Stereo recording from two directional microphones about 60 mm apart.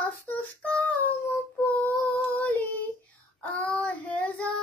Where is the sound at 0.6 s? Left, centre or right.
Centre.